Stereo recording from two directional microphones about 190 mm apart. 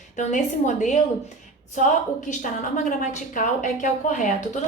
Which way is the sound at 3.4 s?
40° left (ahead or behind).